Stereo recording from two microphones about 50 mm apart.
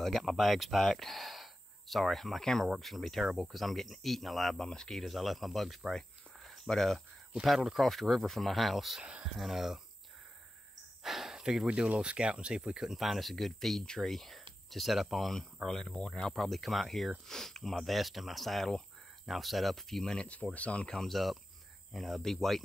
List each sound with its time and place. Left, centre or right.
0.0 s speech: centre
4.6 s speech: centre
5.0 s speech: centre
5.9 s a sound: centre
7.4 s speech: centre
9.0 s speech: right
9.4 s speech: centre
11.0 s speech: centre
20.5 s speech: left
20.9 s speech: centre